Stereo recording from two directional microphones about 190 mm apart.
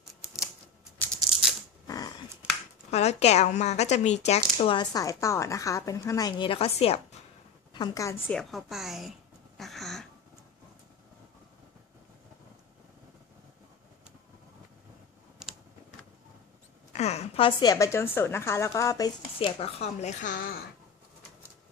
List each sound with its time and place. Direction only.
0.9 s maraca: 10° left (ahead or behind)
1.3 s maraca: 5° right (ahead or behind)
1.9 s a sound: 20° left (ahead or behind)
2.9 s speech: 35° left (ahead or behind)
7.7 s a woman's voice: 20° left (ahead or behind)
8.3 s a woman's voice: centre (ahead or behind)
9.6 s a sound: centre (ahead or behind)
16.9 s a woman's voice: 35° left (ahead or behind); by 19.1 s 20° left (ahead or behind)
19.4 s speech: 30° left (ahead or behind)